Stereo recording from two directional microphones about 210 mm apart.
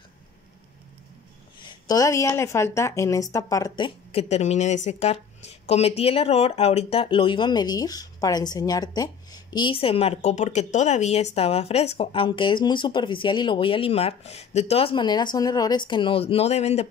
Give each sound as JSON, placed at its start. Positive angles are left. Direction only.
{"t": 1.6, "sound": "speech", "side_deg": 20}